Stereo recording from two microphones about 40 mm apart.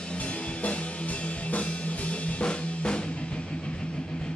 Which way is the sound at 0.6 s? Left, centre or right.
Left.